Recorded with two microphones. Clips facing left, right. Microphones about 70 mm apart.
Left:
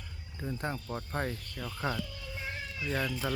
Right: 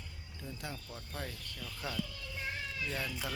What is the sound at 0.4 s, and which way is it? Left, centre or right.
Speech, left.